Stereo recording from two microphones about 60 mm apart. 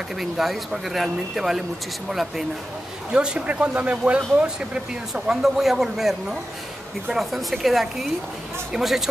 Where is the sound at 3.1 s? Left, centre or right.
Centre.